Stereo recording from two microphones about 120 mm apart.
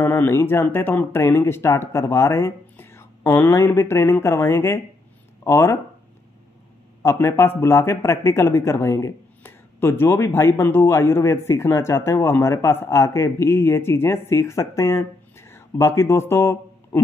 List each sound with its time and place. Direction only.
0.0 s speech: 20° left (ahead or behind)
7.0 s speech: 25° left (ahead or behind)